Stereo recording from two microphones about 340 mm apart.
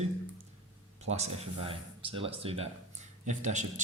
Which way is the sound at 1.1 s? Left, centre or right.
Centre.